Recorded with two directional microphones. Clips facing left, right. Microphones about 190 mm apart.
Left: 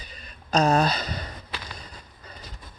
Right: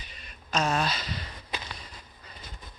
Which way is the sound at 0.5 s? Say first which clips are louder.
Left 7 dB; 35° left (ahead or behind).